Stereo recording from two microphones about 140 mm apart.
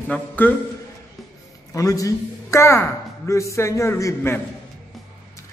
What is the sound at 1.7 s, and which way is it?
A man's voice, 25° left (ahead or behind).